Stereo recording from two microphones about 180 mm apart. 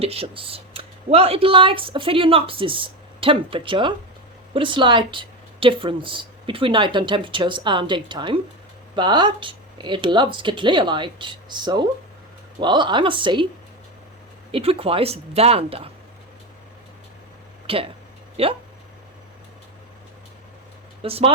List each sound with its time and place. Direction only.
0.0 s speech: 35° right (ahead or behind)
14.5 s speech: 30° right (ahead or behind)
17.7 s speech: 30° right (ahead or behind)
21.0 s speech: 30° right (ahead or behind)